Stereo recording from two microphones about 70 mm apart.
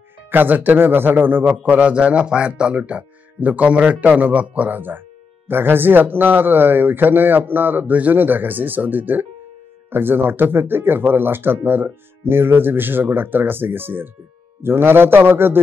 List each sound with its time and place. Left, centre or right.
0.3 s a man's voice: right